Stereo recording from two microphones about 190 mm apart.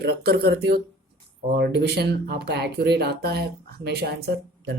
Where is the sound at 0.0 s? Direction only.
55° right (ahead or behind).